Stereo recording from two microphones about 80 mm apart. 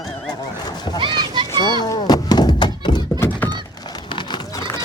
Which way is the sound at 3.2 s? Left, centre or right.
Left.